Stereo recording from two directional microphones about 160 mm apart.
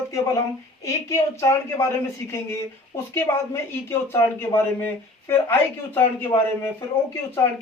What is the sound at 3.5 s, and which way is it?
Speech, 15° left (ahead or behind).